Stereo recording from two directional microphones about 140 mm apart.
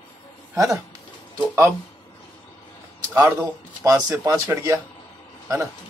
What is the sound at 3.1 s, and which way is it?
Speech, 20° right (ahead or behind).